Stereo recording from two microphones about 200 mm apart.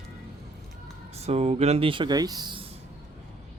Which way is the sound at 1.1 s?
30° right (ahead or behind).